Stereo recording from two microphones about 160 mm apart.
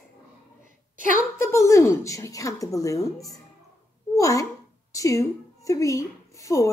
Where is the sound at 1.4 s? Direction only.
15° left (ahead or behind).